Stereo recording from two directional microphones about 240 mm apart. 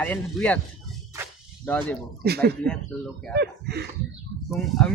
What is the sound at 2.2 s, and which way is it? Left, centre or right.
Speech, right.